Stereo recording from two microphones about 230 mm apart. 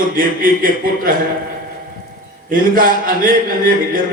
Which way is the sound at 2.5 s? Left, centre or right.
Right.